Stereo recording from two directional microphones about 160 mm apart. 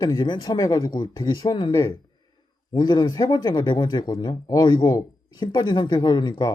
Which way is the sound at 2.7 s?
30° left (ahead or behind).